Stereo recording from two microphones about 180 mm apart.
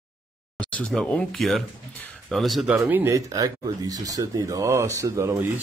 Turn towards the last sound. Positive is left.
turn(degrees=-15)  # may be behind; listen again after turning